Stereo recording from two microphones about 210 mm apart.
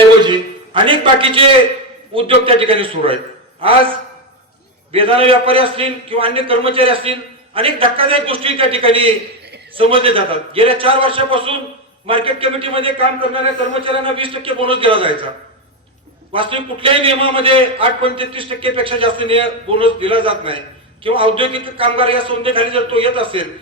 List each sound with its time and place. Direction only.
0.2 s a sound: 20° right (ahead or behind)
2.1 s a man's voice: 25° right (ahead or behind)
16.3 s a man's voice: 25° right (ahead or behind)